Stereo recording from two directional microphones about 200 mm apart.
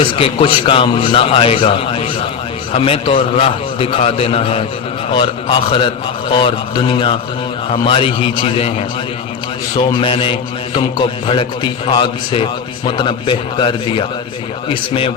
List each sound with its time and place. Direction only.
0.0 s a man's voice: 25° left (ahead or behind)
9.7 s a man's voice: 25° left (ahead or behind)